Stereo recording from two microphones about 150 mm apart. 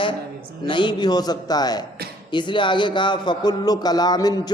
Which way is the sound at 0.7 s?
30° left (ahead or behind).